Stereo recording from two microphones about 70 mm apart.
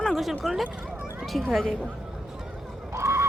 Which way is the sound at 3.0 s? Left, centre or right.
Right.